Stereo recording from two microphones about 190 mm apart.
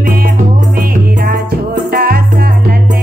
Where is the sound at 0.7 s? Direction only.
50° right (ahead or behind).